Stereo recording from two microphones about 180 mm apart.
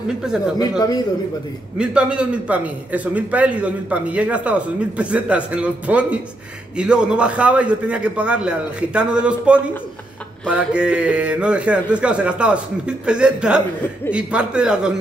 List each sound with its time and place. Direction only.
0.6 s speech: 20° left (ahead or behind)
1.8 s a man's voice: 5° right (ahead or behind)